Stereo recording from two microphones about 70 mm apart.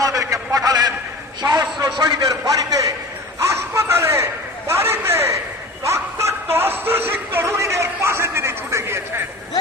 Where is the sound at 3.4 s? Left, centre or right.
Right.